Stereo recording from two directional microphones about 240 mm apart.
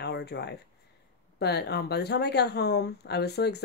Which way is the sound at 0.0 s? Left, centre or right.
Left.